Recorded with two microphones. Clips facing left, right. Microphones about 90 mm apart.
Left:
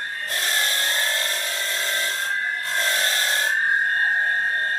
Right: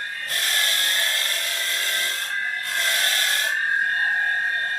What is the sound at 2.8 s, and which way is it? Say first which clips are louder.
Wood: left 1 dB; 25° left (ahead or behind).